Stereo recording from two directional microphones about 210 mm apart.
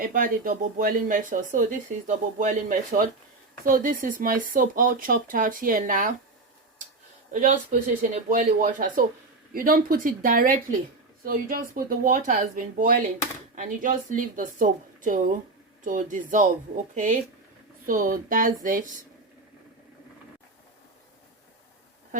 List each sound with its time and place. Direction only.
0.0 s speech: 40° right (ahead or behind)
7.3 s speech: 35° right (ahead or behind)